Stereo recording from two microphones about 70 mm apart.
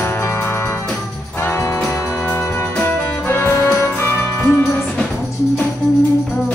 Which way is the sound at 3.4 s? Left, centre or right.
Left.